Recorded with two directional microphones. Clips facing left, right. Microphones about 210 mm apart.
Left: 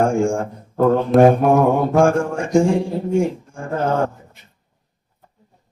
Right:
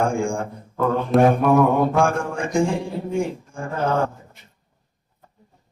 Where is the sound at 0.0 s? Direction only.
45° left (ahead or behind).